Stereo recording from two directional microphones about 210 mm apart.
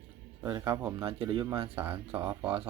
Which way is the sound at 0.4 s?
15° right (ahead or behind).